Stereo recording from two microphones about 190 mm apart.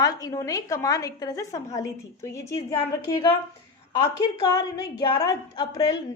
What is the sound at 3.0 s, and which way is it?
Speech, 20° left (ahead or behind).